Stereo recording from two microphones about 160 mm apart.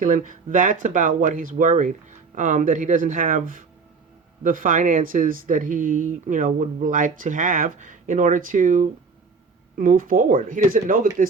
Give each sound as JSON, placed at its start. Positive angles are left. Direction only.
{"t": 0.0, "sound": "speech", "side_deg": -55}